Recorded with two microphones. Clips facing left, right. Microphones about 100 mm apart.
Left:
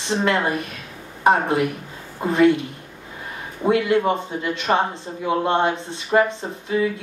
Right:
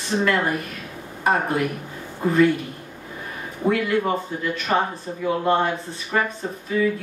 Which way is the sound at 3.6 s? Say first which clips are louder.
Left 3 dB; 20° left (ahead or behind).